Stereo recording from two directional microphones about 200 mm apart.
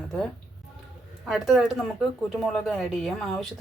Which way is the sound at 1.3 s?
Centre (ahead or behind).